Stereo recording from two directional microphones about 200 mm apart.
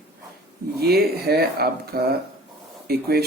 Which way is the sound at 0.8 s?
50° right (ahead or behind).